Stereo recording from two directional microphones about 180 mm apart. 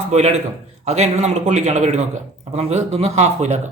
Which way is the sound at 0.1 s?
40° right (ahead or behind).